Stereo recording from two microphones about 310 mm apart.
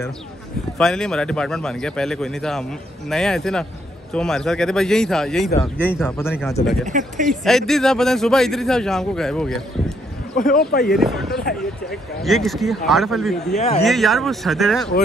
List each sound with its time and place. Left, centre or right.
0.7 s a man's voice: centre
6.9 s speech: right
7.2 s a man's voice: centre
10.3 s speech: left
11.0 s a man's voice: centre